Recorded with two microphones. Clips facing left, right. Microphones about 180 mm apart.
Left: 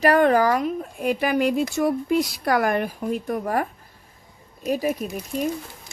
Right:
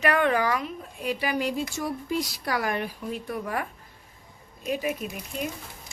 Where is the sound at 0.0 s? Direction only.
40° left (ahead or behind).